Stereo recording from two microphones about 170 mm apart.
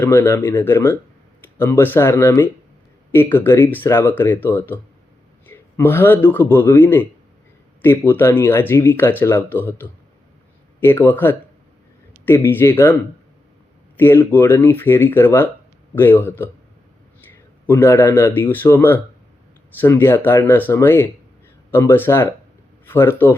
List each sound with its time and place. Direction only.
0.0 s a man's voice: 15° left (ahead or behind)